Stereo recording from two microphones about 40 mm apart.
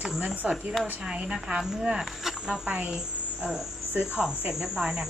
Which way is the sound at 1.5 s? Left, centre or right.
Centre.